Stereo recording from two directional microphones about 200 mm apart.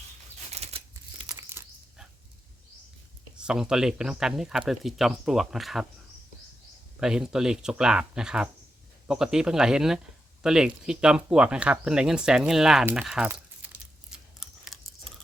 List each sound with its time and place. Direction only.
0.5 s scissors: 30° right (ahead or behind)
1.3 s a sound: 15° right (ahead or behind)
3.3 s speech: 5° right (ahead or behind)
7.0 s speech: 5° right (ahead or behind)
14.1 s chewing: 5° right (ahead or behind)